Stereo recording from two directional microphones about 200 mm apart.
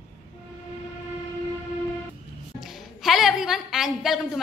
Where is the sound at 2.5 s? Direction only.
Centre (ahead or behind).